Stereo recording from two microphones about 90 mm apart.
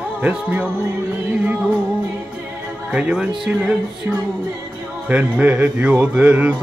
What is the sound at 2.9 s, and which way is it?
Music, 15° right (ahead or behind).